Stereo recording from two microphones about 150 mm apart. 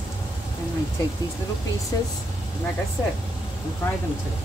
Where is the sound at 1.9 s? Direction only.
25° left (ahead or behind).